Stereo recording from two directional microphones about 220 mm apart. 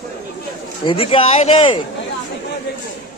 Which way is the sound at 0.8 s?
25° left (ahead or behind).